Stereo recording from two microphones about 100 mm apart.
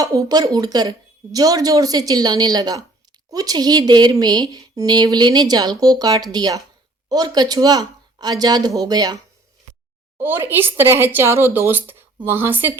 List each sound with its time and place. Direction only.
0.0 s speech: 35° right (ahead or behind)
10.2 s speech: 20° right (ahead or behind)